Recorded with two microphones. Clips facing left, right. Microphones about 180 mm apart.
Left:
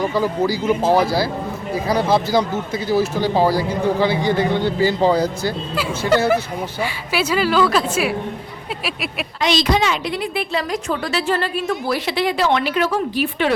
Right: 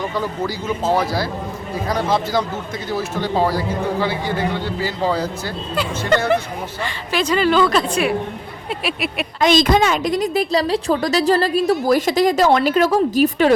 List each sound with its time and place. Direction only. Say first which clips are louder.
0.0 s speech: left 4 dB; 10° left (ahead or behind)
4.8 s speech: left 5 dB; 20° left (ahead or behind)
5.7 s a woman's voice: even; 5° left (ahead or behind)
9.4 s a woman's voice: right 3 dB; 50° right (ahead or behind)